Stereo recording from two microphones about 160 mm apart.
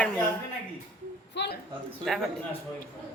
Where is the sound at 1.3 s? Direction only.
90° left.